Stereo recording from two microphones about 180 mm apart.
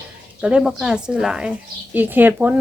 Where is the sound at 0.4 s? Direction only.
5° right (ahead or behind).